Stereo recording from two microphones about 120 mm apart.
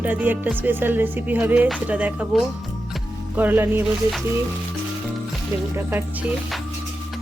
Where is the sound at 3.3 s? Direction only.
15° right (ahead or behind).